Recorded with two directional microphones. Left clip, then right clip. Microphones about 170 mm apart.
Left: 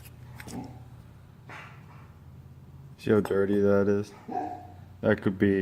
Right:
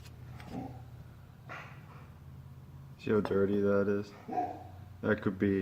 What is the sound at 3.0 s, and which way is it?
Speech, 55° left (ahead or behind).